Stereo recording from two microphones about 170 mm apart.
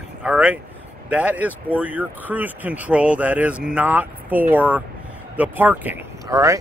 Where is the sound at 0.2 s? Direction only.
5° right (ahead or behind).